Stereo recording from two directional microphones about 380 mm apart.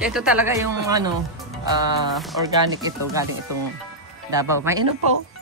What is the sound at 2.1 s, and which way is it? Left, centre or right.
Speech, centre.